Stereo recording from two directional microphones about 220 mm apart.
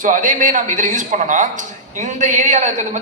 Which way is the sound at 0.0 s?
35° right (ahead or behind).